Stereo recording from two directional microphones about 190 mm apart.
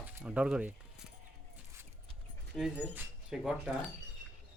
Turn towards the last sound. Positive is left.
turn(degrees=-5)  # may be behind; listen again after turning